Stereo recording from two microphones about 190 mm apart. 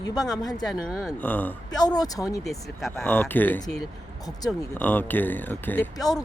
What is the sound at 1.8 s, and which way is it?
Speech, 20° left (ahead or behind).